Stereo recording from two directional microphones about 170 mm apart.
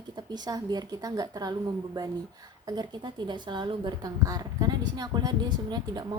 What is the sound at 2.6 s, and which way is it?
A woman's voice, 25° right (ahead or behind).